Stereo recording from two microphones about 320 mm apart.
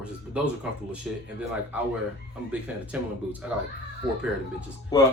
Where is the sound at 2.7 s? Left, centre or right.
Centre.